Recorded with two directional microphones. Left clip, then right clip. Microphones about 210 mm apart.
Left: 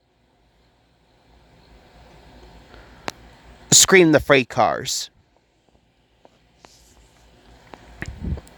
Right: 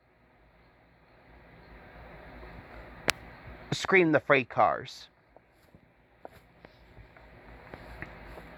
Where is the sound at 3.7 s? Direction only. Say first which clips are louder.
Left 11 dB; 50° left (ahead or behind).